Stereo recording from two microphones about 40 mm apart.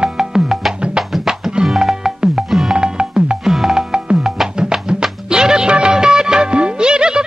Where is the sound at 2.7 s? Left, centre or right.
Right.